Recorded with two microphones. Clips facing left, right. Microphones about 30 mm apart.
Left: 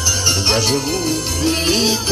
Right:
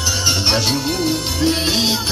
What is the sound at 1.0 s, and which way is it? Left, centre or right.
Music, centre.